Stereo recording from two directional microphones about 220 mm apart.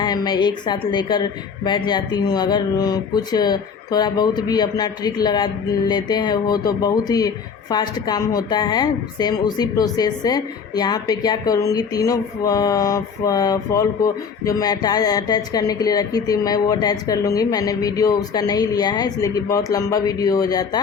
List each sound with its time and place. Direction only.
0.0 s a woman's voice: 20° left (ahead or behind)